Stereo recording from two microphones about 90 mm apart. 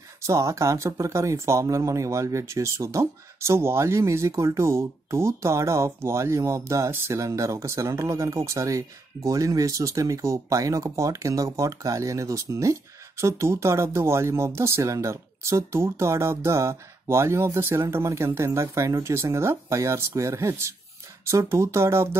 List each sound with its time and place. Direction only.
0.3 s speech: 35° right (ahead or behind)